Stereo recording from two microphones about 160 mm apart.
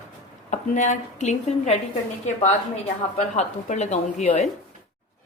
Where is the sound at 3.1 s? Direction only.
45° left (ahead or behind).